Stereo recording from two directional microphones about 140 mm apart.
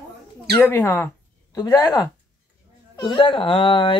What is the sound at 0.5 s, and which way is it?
Speech, 20° left (ahead or behind).